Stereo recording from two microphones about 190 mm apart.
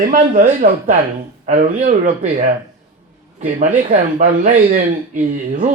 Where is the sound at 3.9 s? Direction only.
45° right (ahead or behind).